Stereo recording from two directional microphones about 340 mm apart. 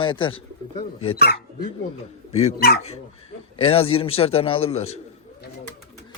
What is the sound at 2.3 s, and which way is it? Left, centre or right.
Speech, centre.